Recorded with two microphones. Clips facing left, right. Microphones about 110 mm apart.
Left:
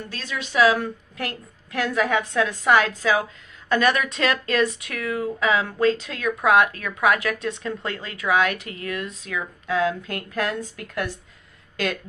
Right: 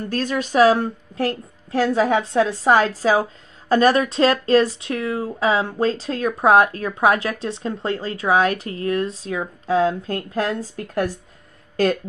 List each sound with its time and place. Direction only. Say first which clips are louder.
0.1 s a woman's voice: right 8 dB; 45° right (ahead or behind)